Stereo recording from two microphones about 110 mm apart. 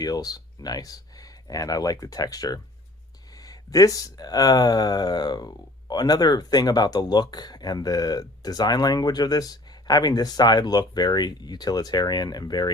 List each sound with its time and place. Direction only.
0.0 s speech: 35° left (ahead or behind)